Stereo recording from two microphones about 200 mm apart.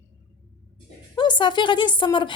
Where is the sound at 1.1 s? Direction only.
25° left (ahead or behind).